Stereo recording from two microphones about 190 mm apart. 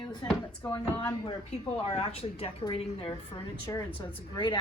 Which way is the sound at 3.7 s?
15° left (ahead or behind).